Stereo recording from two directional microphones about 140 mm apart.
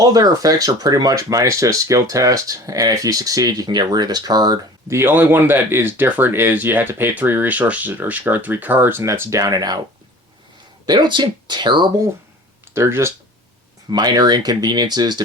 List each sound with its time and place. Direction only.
0.0 s speech: 25° right (ahead or behind)
10.8 s speech: 30° right (ahead or behind)
12.7 s speech: 20° right (ahead or behind)
13.9 s speech: 30° right (ahead or behind)